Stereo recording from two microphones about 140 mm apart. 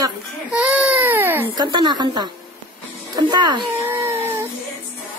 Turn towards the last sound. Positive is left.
turn(degrees=-15)  # may be behind; listen again after turning